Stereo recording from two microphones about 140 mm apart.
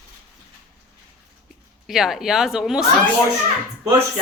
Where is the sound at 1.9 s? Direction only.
5° right (ahead or behind).